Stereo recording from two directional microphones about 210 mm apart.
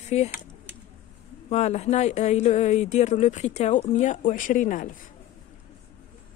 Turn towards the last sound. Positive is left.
turn(degrees=40)  # may be behind; listen again after turning